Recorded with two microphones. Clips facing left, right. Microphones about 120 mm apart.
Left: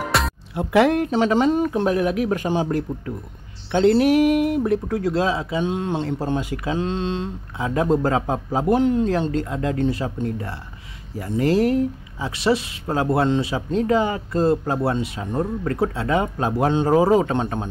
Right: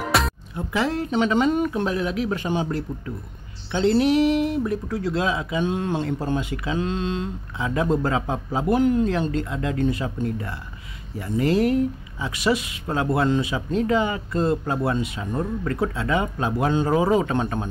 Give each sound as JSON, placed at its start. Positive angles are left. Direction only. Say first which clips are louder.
{"t": 0.1, "sound": "music", "louder": "even", "side_deg": 0}
{"t": 0.6, "sound": "speech", "louder": "left 7 dB", "side_deg": 60}
{"t": 1.1, "sound": "speech", "louder": "left 2 dB", "side_deg": 35}
{"t": 1.9, "sound": "speech", "louder": "left 4 dB", "side_deg": 50}
{"t": 3.7, "sound": "speech", "louder": "left 3 dB", "side_deg": 55}
{"t": 5.1, "sound": "speech", "louder": "even", "side_deg": 35}
{"t": 5.6, "sound": "speech", "louder": "left 1 dB", "side_deg": 20}
{"t": 6.0, "sound": "speech", "louder": "left 1 dB", "side_deg": 30}
{"t": 6.5, "sound": "speech", "louder": "left 2 dB", "side_deg": 45}
{"t": 6.8, "sound": "speech", "louder": "even", "side_deg": 30}
{"t": 7.5, "sound": "speech", "louder": "left 3 dB", "side_deg": 40}
{"t": 8.7, "sound": "speech", "louder": "even", "side_deg": 25}
{"t": 9.3, "sound": "speech", "louder": "left 2 dB", "side_deg": 40}
{"t": 17.4, "sound": "speech", "louder": "left 1 dB", "side_deg": 25}